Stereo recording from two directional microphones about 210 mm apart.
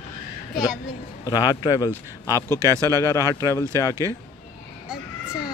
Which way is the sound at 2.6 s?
15° right (ahead or behind).